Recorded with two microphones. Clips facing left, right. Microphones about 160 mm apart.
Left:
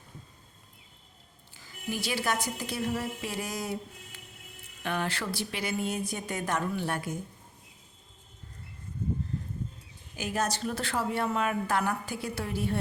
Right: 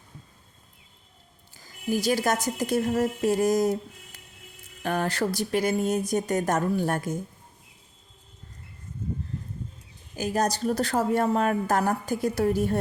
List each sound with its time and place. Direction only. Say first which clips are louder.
1.5 s a woman's voice: right 8 dB; 40° right (ahead or behind)
10.2 s speech: right 5 dB; 40° right (ahead or behind)